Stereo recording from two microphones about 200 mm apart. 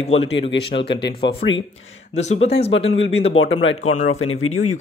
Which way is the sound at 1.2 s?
20° left (ahead or behind).